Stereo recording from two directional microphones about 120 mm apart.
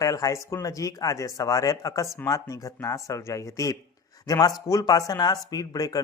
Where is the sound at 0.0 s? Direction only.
30° left (ahead or behind).